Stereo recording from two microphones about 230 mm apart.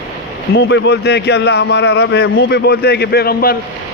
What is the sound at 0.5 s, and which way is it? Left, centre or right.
A man's voice, left.